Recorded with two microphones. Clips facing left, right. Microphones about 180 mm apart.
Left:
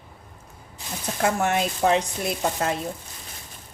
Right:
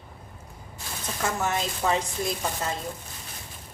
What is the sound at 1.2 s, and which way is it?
Speech, 65° left (ahead or behind).